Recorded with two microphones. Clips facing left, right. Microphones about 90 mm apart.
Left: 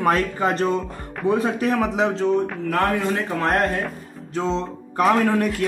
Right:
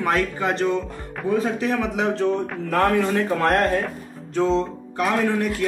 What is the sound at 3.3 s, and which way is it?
Speech, 5° left (ahead or behind).